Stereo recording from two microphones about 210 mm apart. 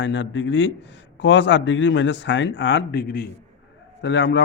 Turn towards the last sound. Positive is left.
turn(degrees=55)  # may be behind; listen again after turning